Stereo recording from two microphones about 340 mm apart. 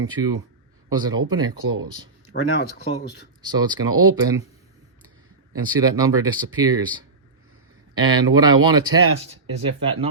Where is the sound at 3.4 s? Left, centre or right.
Centre.